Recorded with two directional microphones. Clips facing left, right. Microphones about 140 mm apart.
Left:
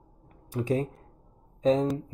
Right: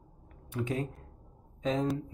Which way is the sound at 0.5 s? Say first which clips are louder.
Left 6 dB; 35° left (ahead or behind).